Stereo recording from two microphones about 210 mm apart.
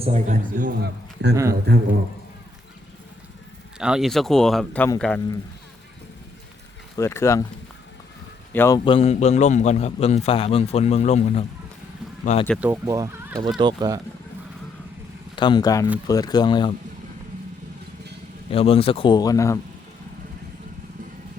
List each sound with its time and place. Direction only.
0.0 s a man's voice: 35° right (ahead or behind)
0.8 s a man's voice: 50° right (ahead or behind)
3.8 s speech: 5° right (ahead or behind)
6.9 s speech: 15° left (ahead or behind)
8.5 s speech: 10° left (ahead or behind)
8.8 s a man's voice: 25° left (ahead or behind)
12.5 s speech: 10° right (ahead or behind)
15.4 s speech: 20° left (ahead or behind)
18.5 s speech: 25° left (ahead or behind)